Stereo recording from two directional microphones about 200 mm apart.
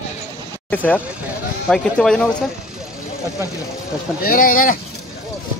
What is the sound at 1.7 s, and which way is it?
Speech, 5° left (ahead or behind).